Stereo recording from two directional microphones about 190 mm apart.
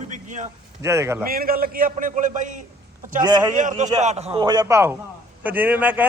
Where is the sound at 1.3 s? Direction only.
50° right (ahead or behind).